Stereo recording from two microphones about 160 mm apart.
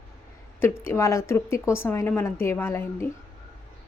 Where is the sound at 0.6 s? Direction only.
15° left (ahead or behind).